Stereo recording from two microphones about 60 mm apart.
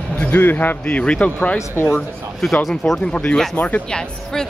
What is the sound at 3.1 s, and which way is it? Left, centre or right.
Speech, left.